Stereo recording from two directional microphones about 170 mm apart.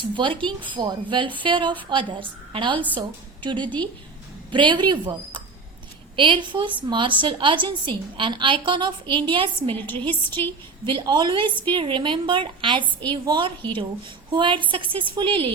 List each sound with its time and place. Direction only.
0.0 s a woman's voice: 30° right (ahead or behind)
3.6 s a woman's voice: 10° left (ahead or behind)
4.5 s a woman's voice: 30° right (ahead or behind)
9.7 s a woman's voice: 10° left (ahead or behind)
10.8 s a woman's voice: 25° right (ahead or behind)